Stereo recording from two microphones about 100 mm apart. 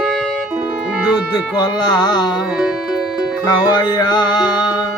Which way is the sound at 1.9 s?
45° left (ahead or behind).